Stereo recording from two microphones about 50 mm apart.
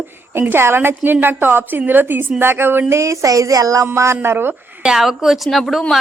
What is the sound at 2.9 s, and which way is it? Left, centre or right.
Speech, right.